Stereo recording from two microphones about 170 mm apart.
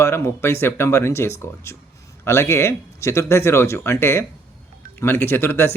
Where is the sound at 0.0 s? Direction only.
15° left (ahead or behind).